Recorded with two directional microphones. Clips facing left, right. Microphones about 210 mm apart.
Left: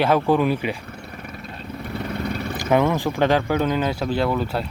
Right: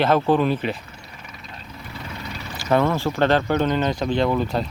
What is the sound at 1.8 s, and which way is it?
Vehicle, 55° left (ahead or behind).